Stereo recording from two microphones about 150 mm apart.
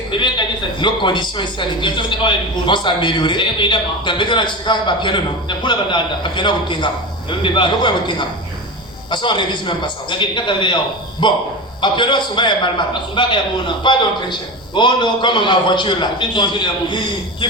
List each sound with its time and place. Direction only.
0.1 s a man's voice: 30° left (ahead or behind)